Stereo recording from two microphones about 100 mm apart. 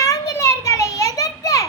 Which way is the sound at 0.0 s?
35° left (ahead or behind).